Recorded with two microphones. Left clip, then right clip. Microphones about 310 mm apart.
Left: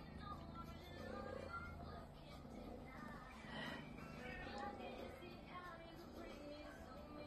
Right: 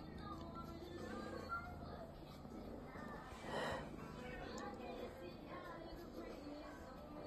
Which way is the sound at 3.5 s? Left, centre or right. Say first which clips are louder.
Right 7 dB; right.